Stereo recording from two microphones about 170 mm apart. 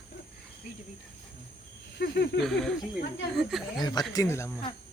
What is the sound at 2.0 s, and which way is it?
Speech, 75° left (ahead or behind).